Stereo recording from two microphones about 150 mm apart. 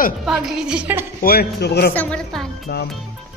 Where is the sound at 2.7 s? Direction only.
90° left.